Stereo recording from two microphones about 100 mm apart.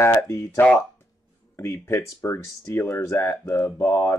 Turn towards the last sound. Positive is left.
turn(degrees=30)  # may be behind; listen again after turning